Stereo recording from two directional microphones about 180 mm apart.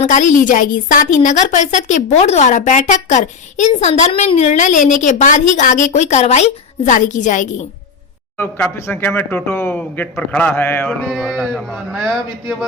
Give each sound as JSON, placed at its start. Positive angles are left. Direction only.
{"t": 0.0, "sound": "a woman's voice", "side_deg": 45}
{"t": 8.4, "sound": "speech", "side_deg": 10}